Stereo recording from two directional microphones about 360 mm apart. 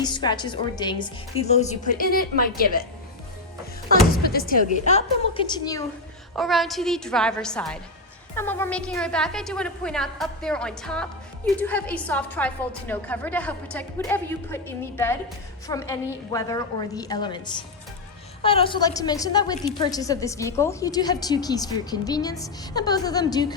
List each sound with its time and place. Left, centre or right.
0.0 s a woman's voice: centre
4.1 s a woman's voice: left
6.3 s a woman's voice: centre